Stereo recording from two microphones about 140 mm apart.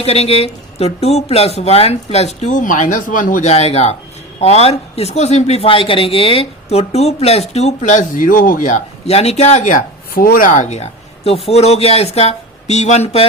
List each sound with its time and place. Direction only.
0.0 s speech: 45° left (ahead or behind); by 3.5 s 70° left (ahead or behind)
3.5 s speech: 50° left (ahead or behind)